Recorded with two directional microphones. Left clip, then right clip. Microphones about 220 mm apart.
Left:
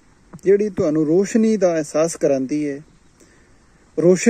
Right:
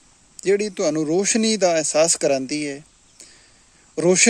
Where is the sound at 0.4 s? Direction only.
20° right (ahead or behind).